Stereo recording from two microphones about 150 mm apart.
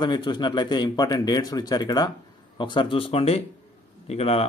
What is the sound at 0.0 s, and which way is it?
Speech, 30° left (ahead or behind).